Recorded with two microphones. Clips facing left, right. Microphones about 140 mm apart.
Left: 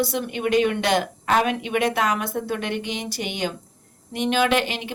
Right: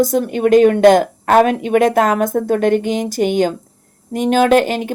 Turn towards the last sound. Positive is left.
turn(degrees=-45)  # may be behind; listen again after turning